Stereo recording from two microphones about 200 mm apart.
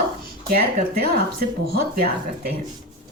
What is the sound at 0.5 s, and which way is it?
A woman's voice, 50° right (ahead or behind).